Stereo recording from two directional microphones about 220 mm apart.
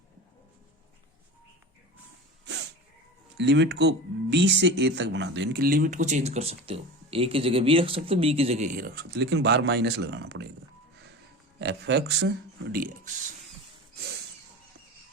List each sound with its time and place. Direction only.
3.3 s speech: 50° right (ahead or behind)
11.6 s speech: 50° right (ahead or behind)